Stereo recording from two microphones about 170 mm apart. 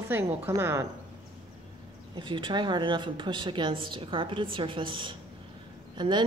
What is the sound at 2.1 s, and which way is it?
A woman's voice, 30° right (ahead or behind).